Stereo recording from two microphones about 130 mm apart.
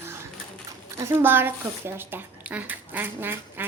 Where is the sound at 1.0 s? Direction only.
20° right (ahead or behind).